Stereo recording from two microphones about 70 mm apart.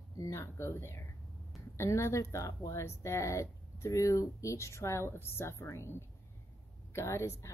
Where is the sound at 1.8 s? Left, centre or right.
Left.